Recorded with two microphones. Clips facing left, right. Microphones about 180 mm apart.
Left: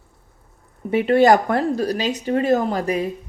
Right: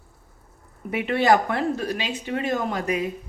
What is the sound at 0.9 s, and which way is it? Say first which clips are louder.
Speech: left 6 dB; 35° left (ahead or behind).